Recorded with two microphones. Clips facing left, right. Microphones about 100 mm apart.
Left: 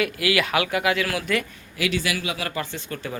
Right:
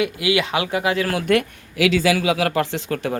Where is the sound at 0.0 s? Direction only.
20° right (ahead or behind).